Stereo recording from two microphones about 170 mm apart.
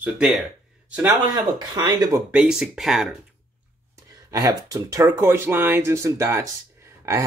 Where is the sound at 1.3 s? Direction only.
25° right (ahead or behind).